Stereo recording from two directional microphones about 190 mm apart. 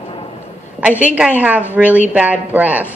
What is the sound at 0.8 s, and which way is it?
A woman's voice, 5° right (ahead or behind).